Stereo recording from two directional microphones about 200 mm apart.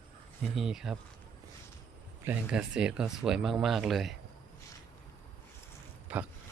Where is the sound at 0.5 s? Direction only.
Centre (ahead or behind).